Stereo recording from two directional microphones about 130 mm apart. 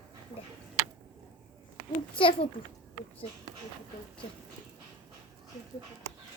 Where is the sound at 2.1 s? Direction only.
45° left (ahead or behind).